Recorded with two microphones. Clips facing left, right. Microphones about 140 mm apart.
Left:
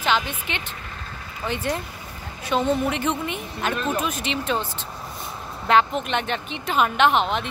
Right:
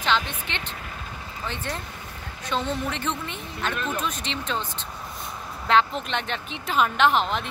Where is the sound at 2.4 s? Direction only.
10° left (ahead or behind).